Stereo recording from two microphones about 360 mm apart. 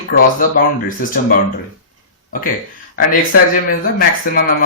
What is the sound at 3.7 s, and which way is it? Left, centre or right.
Speech, left.